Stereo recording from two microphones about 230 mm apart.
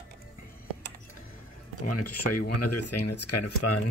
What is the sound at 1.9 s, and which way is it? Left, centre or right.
Speech, left.